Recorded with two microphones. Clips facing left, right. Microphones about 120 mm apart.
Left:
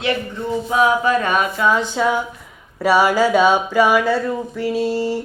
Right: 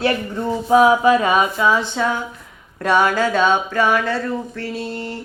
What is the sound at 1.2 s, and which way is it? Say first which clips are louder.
Speech: right 1 dB; 5° right (ahead or behind).